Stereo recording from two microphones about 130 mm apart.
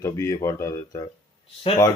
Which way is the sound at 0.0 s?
25° left (ahead or behind).